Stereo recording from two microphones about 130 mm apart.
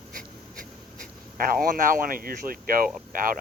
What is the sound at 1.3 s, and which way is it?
Speech, 90° right.